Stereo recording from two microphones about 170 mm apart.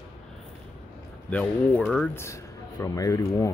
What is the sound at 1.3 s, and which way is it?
Speech, 5° left (ahead or behind).